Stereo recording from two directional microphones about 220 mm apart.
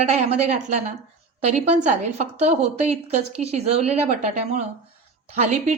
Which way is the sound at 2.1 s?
30° right (ahead or behind).